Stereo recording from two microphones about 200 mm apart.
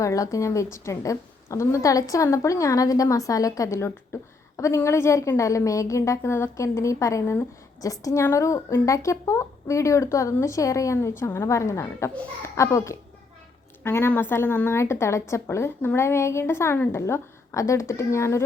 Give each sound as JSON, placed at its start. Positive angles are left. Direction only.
{"t": 0.0, "sound": "a woman's voice", "side_deg": 15}